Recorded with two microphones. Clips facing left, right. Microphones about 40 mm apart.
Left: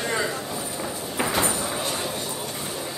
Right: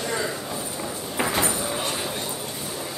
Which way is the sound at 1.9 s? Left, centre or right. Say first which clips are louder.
Even; centre.